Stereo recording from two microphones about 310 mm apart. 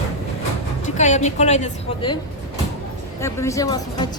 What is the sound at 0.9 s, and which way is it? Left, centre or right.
A woman's voice, left.